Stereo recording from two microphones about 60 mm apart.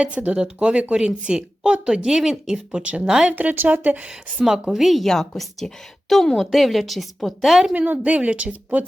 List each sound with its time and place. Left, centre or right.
0.0 s speech: right
3.3 s a woman's voice: right
4.7 s a woman's voice: centre
7.7 s a woman's voice: right